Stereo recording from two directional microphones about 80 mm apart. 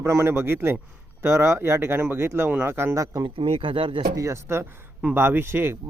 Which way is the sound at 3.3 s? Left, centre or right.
Right.